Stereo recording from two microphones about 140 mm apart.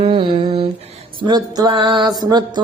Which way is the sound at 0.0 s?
40° right (ahead or behind).